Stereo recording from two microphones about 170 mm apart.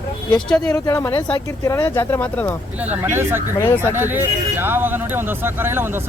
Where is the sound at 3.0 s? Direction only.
15° right (ahead or behind).